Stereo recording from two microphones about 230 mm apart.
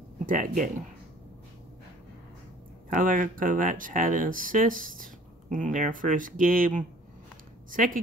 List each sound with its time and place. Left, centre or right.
0.3 s speech: right
2.9 s speech: right